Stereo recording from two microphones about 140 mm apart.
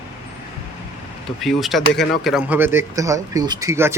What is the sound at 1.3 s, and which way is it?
Speech, centre (ahead or behind).